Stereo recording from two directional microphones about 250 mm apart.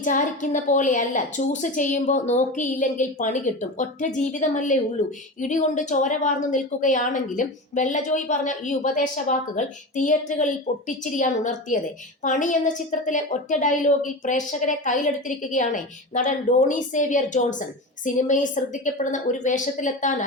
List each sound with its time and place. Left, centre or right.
0.0 s a woman's voice: left